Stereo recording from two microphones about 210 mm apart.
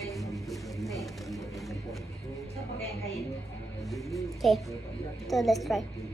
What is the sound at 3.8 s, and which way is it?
Speech, centre (ahead or behind).